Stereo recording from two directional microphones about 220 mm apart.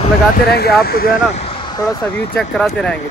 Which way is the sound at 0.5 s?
45° left (ahead or behind).